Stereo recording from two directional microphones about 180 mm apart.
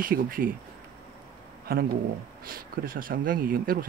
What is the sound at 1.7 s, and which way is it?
Speech, 55° right (ahead or behind).